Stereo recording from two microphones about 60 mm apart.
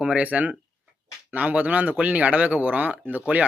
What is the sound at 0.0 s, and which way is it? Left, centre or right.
Speech, right.